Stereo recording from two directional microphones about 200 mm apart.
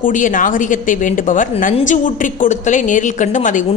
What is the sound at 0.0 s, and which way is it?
A woman's voice, 40° left (ahead or behind).